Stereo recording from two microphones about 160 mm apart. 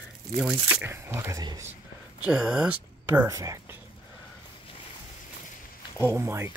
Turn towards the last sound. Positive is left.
turn(degrees=-15)  # may be behind; listen again after turning